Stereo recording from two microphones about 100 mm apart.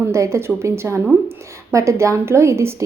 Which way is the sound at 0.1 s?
30° right (ahead or behind).